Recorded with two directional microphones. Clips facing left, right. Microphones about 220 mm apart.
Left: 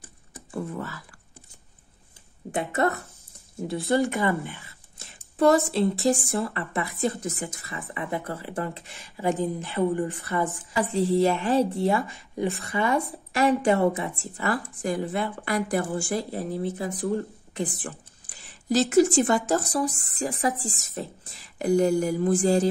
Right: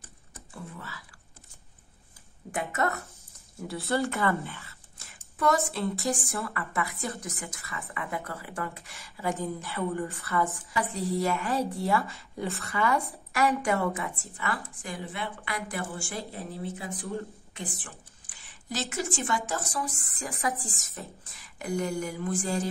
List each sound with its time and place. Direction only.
0.5 s speech: 50° left (ahead or behind)
2.5 s speech: 30° left (ahead or behind)
3.6 s speech: 15° left (ahead or behind)
5.4 s speech: 30° left (ahead or behind)
10.8 s speech: 30° left (ahead or behind)